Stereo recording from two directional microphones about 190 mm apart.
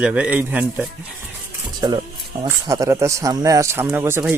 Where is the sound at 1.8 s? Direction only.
20° right (ahead or behind).